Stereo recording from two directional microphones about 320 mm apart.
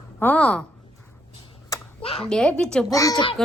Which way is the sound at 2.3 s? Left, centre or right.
Centre.